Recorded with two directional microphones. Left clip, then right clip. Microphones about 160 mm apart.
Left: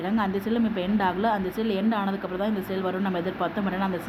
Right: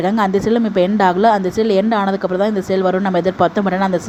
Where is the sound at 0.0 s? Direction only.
50° right (ahead or behind).